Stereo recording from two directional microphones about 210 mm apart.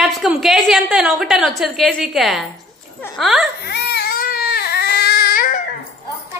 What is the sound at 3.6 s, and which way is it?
Baby cry, 50° left (ahead or behind).